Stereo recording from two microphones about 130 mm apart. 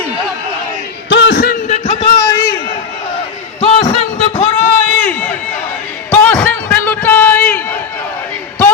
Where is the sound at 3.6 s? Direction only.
35° left (ahead or behind).